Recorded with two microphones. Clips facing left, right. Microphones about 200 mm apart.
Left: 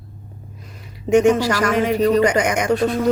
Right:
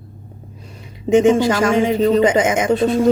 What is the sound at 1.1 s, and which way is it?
A man's voice, 25° right (ahead or behind).